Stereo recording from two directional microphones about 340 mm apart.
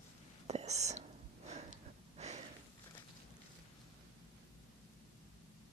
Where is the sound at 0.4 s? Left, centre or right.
Centre.